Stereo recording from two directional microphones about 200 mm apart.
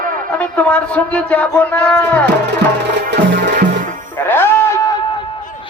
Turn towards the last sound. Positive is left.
turn(degrees=15)  # may be behind; listen again after turning